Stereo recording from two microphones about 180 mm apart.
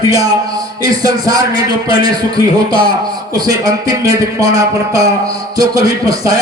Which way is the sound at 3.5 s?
20° right (ahead or behind).